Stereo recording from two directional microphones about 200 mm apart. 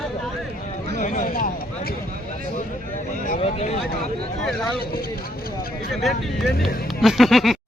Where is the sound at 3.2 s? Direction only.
35° left (ahead or behind).